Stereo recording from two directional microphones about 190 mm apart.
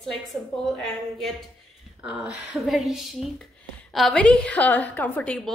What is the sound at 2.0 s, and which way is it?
A woman's voice, 5° right (ahead or behind).